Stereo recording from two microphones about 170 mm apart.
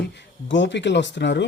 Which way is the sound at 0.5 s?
90° left.